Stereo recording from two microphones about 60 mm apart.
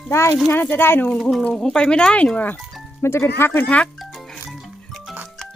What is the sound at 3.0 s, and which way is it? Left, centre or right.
Speech, left.